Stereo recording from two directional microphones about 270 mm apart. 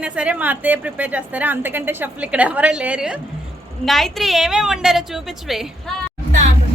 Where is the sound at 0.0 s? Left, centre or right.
Centre.